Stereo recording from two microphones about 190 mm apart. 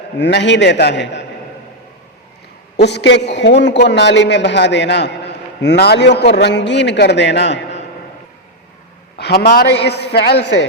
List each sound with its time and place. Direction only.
0.2 s a man's voice: 65° left (ahead or behind)
2.7 s a man's voice: 60° left (ahead or behind)
9.1 s a man's voice: 60° left (ahead or behind)